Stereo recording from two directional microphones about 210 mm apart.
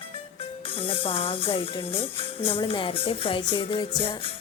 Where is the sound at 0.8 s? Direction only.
25° left (ahead or behind).